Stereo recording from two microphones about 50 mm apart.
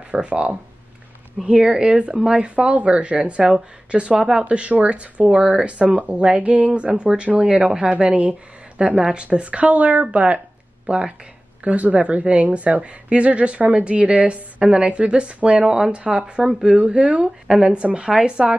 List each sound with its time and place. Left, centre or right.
0.1 s a woman's voice: right
1.4 s a woman's voice: centre